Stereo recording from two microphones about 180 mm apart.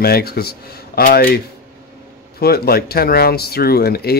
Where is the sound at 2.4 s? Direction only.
60° left (ahead or behind).